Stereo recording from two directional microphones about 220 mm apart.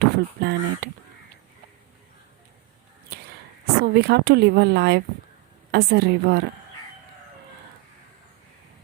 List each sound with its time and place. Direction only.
0.0 s speech: 50° right (ahead or behind)
3.8 s speech: 45° right (ahead or behind)